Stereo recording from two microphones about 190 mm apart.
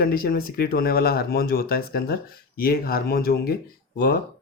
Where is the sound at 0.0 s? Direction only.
50° left (ahead or behind).